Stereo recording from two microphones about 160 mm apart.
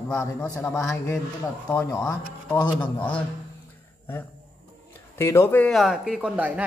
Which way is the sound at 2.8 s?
10° left (ahead or behind).